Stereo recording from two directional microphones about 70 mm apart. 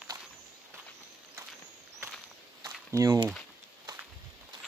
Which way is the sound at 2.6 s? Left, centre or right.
Right.